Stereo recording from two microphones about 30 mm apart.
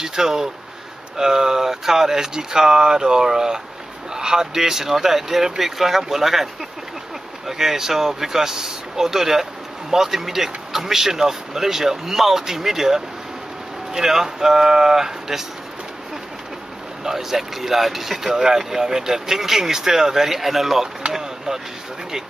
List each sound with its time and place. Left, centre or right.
0.0 s speech: centre
17.0 s speech: centre
18.3 s speech: centre
21.1 s speech: centre